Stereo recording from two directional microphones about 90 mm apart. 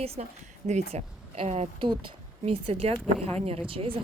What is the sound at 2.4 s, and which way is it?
Speech, 90° right.